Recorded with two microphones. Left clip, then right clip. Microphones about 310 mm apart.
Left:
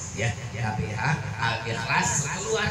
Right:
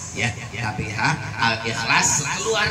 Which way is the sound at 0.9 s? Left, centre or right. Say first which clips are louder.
Right 9 dB; right.